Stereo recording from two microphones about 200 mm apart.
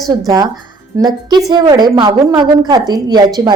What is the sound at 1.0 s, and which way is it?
A woman's voice, 20° right (ahead or behind).